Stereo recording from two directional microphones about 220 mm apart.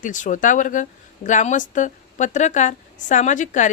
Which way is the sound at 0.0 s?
35° left (ahead or behind).